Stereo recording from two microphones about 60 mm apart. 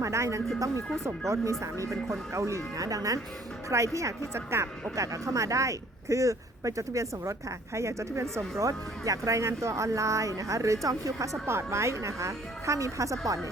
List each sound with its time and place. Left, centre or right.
0.0 s speech: right
3.9 s speech: right
4.4 s speech: right
11.4 s speech: right